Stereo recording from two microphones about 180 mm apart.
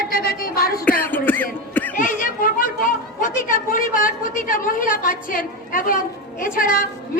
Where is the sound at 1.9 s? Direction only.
50° left (ahead or behind).